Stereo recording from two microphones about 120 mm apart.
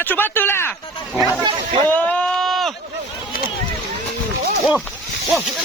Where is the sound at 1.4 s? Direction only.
40° right (ahead or behind).